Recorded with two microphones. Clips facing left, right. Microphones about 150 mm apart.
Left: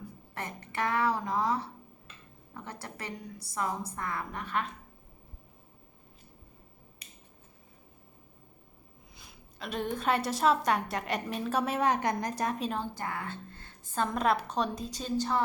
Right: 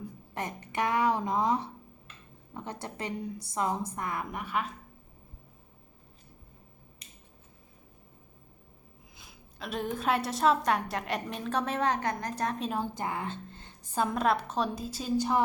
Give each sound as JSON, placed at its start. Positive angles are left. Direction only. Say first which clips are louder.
{"t": 0.3, "sound": "a woman's voice", "louder": "right 3 dB", "side_deg": -20}
{"t": 9.1, "sound": "a woman's voice", "louder": "even", "side_deg": 0}
{"t": 12.7, "sound": "a woman's voice", "louder": "right 2 dB", "side_deg": -15}